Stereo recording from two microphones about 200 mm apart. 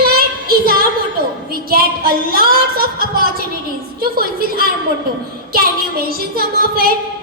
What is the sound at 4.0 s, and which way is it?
A woman's voice, 50° right (ahead or behind).